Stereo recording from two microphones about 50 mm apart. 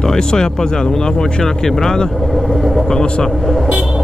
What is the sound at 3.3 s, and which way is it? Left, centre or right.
Speech, centre.